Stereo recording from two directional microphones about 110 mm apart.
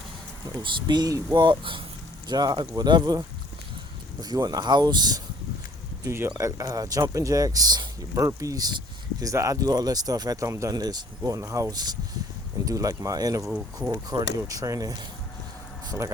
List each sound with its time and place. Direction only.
0.6 s speech: 40° right (ahead or behind)
6.1 s speech: 20° right (ahead or behind)
6.3 s speech: 35° right (ahead or behind)